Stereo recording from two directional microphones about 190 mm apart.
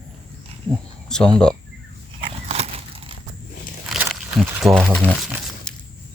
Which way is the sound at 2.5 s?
30° right (ahead or behind).